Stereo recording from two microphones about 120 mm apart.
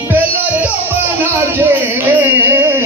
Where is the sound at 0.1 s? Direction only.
15° right (ahead or behind).